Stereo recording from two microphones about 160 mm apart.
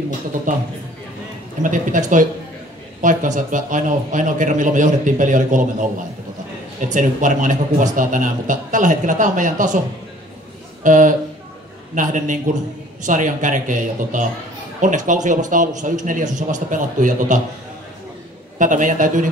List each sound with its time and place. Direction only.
1.6 s a man's voice: 55° right (ahead or behind)
6.9 s a man's voice: 55° right (ahead or behind)
10.8 s a man's voice: 55° right (ahead or behind)
18.6 s a man's voice: 55° right (ahead or behind)